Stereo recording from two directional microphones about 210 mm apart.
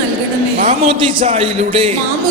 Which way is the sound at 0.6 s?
35° right (ahead or behind).